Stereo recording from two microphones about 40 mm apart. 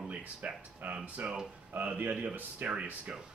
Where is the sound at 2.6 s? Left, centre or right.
Right.